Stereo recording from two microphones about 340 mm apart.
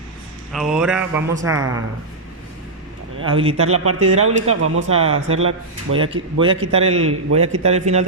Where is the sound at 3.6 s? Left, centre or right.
Right.